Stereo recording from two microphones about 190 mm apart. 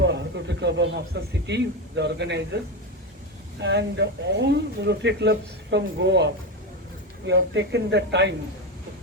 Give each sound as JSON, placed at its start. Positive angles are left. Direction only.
{"t": 0.0, "sound": "a man's voice", "side_deg": -65}
{"t": 3.6, "sound": "speech", "side_deg": -65}